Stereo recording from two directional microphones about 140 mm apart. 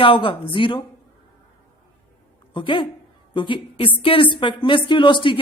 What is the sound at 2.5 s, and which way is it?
Speech, 35° left (ahead or behind).